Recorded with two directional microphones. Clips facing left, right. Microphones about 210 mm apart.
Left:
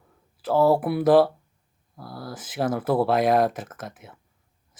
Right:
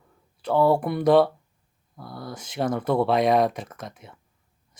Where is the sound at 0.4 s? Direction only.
5° left (ahead or behind).